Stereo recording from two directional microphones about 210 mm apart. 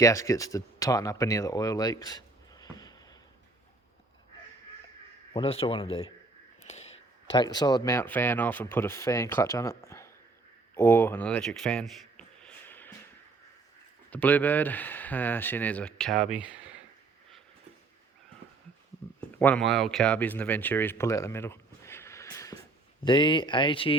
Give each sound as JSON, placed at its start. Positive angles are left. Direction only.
{"t": 0.0, "sound": "speech", "side_deg": 15}
{"t": 5.3, "sound": "speech", "side_deg": 25}
{"t": 6.7, "sound": "a sound", "side_deg": 30}
{"t": 7.3, "sound": "speech", "side_deg": 20}
{"t": 10.8, "sound": "a sound", "side_deg": 10}
{"t": 14.1, "sound": "speech", "side_deg": 10}
{"t": 19.3, "sound": "speech", "side_deg": 10}